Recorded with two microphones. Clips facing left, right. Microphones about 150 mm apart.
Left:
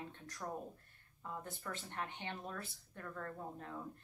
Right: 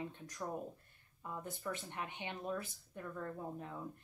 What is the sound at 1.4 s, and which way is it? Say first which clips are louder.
Speech: right 4 dB; 15° right (ahead or behind).